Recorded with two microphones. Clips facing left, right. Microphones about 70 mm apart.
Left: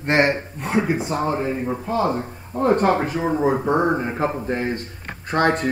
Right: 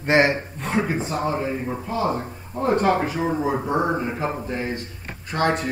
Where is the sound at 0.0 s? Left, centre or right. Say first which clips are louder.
Even; centre.